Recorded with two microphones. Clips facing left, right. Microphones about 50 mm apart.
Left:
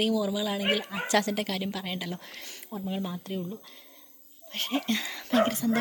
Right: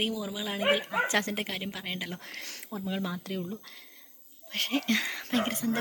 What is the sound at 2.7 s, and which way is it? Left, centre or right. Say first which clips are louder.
Speech: left 1 dB; right.